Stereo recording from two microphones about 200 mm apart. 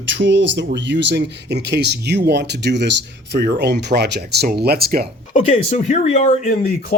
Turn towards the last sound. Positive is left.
turn(degrees=45)  # may be behind; listen again after turning